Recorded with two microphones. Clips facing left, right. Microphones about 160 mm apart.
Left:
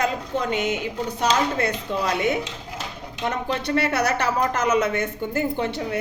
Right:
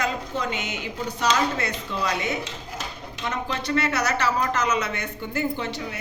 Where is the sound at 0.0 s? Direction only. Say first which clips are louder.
Left 3 dB; 50° left (ahead or behind).